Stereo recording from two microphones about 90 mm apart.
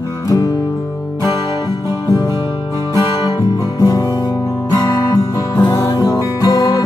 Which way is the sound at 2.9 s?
45° left (ahead or behind).